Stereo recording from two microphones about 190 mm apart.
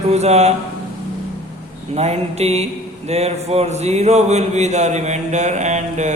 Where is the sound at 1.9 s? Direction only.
35° right (ahead or behind).